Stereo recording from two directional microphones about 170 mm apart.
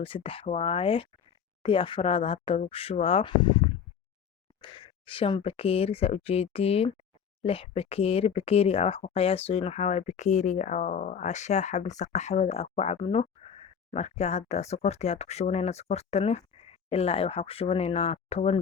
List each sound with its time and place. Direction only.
0.0 s speech: 30° left (ahead or behind)